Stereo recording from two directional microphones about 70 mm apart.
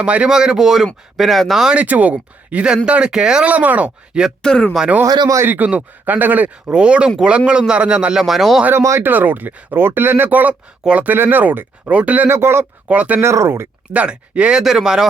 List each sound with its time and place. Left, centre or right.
0.0 s speech: centre
1.7 s speech: right
3.5 s speech: right
4.4 s speech: centre
5.0 s speech: right
5.5 s speech: right
8.2 s speech: centre
8.8 s speech: right
9.0 s speech: right
12.9 s speech: centre
13.1 s speech: right
13.9 s speech: centre